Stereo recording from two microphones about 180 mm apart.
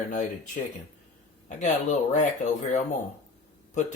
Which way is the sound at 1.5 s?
45° left (ahead or behind).